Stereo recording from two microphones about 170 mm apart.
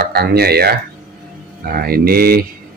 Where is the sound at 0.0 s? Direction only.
65° right (ahead or behind).